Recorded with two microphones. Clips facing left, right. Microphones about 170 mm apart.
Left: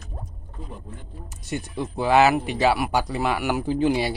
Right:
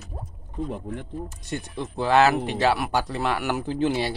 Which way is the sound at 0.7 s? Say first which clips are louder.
Right 8 dB; 75° right (ahead or behind).